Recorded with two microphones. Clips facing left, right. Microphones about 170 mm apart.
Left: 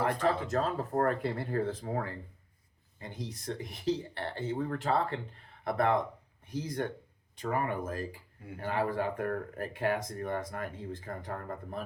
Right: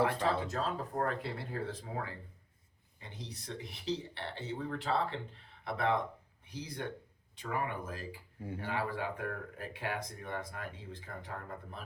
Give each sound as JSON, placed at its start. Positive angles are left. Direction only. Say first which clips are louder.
{"t": 0.0, "sound": "speech", "louder": "left 2 dB", "side_deg": 50}
{"t": 3.0, "sound": "speech", "louder": "left 7 dB", "side_deg": 50}